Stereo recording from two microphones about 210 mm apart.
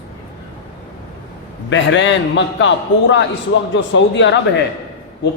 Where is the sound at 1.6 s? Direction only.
60° left (ahead or behind).